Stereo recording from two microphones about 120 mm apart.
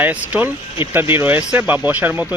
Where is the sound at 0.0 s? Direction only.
15° right (ahead or behind).